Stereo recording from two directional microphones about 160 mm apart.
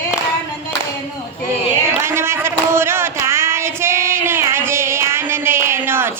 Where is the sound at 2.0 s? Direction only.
15° right (ahead or behind).